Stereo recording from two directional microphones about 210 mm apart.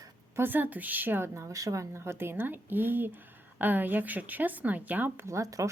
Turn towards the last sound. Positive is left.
turn(degrees=-15)  # may be behind; listen again after turning